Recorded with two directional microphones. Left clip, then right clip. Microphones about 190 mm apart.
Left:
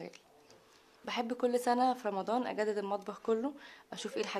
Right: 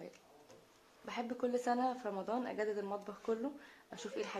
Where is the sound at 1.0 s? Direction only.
45° left (ahead or behind).